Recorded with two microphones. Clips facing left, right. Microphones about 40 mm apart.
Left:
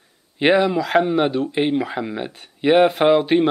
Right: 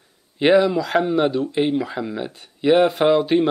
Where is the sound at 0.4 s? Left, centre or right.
Centre.